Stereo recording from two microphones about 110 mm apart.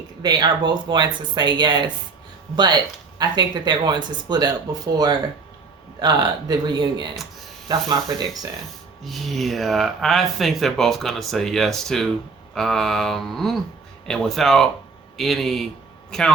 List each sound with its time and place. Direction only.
0.2 s speech: 40° right (ahead or behind)
3.2 s speech: 40° right (ahead or behind)
9.0 s a man's voice: centre (ahead or behind)